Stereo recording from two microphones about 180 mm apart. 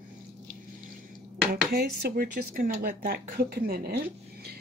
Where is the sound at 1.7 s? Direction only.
60° right (ahead or behind).